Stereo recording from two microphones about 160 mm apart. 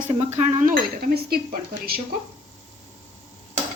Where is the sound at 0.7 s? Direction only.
70° right (ahead or behind).